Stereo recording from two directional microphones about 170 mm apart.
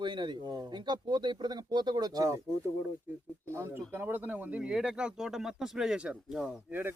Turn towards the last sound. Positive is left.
turn(degrees=-5)  # may be behind; listen again after turning